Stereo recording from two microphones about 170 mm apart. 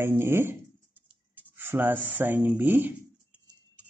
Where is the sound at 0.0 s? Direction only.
15° right (ahead or behind).